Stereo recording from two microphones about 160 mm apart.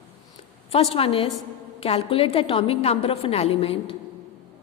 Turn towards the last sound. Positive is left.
turn(degrees=35)  # may be behind; listen again after turning